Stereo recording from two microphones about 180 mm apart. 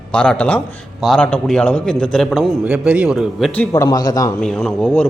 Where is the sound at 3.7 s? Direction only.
20° left (ahead or behind).